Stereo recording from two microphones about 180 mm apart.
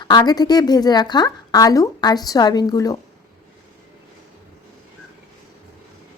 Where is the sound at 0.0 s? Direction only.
25° left (ahead or behind).